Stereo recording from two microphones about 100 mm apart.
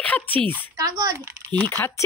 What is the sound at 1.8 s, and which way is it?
Speech, 20° left (ahead or behind).